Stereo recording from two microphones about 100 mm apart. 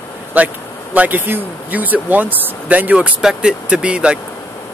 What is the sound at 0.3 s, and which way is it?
Speech, 15° right (ahead or behind).